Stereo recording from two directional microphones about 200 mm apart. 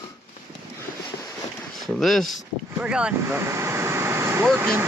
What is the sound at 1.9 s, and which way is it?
Speech, centre (ahead or behind).